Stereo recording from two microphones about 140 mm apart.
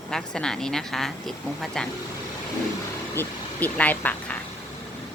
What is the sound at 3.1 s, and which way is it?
A woman's voice, 10° left (ahead or behind).